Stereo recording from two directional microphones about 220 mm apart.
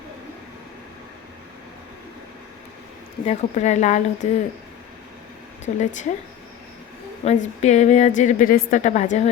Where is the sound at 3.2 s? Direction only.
30° left (ahead or behind).